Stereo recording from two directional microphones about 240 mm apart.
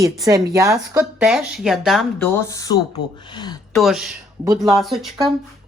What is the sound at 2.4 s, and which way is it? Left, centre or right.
Speech, centre.